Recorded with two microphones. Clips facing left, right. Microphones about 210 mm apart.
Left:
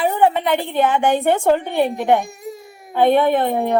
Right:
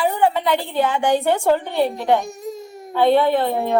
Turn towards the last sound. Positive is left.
turn(degrees=15)  # may be behind; listen again after turning